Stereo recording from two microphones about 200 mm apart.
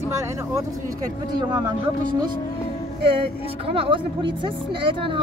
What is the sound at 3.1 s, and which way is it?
Speech, 25° right (ahead or behind).